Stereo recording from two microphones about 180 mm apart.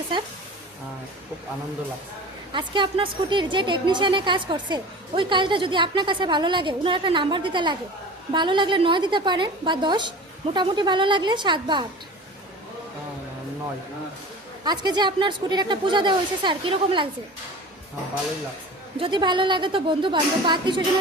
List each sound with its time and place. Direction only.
2.5 s a woman's voice: 25° right (ahead or behind)
14.6 s a woman's voice: 25° right (ahead or behind)
18.9 s a woman's voice: 30° right (ahead or behind)